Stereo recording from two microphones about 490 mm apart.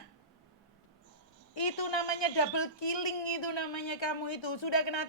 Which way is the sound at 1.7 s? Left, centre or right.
Left.